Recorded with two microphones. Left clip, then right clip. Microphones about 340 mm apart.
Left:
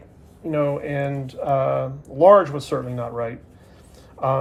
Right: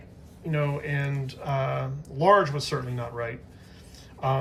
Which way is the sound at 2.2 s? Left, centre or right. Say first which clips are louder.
Left 7 dB; centre.